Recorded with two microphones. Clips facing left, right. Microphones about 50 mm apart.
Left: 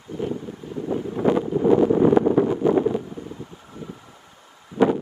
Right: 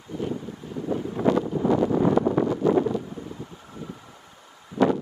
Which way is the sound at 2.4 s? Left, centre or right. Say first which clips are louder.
Left 2 dB; left.